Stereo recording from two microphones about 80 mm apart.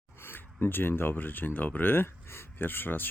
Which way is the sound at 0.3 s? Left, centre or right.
Left.